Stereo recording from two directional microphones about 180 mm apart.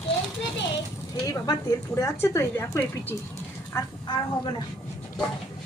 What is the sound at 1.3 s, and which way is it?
A woman's voice, 20° left (ahead or behind).